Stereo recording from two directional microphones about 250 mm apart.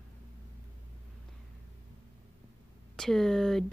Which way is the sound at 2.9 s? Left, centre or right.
Centre.